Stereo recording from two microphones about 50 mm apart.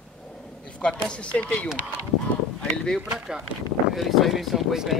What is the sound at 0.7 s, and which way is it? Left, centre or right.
Speech, left.